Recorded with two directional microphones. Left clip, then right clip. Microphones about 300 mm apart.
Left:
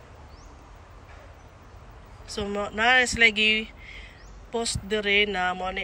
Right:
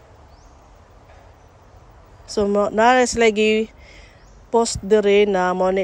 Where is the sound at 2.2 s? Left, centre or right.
Centre.